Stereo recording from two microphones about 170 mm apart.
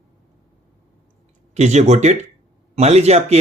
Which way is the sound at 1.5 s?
40° right (ahead or behind).